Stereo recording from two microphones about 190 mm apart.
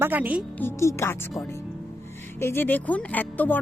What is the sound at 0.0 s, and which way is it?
Speech, 10° right (ahead or behind).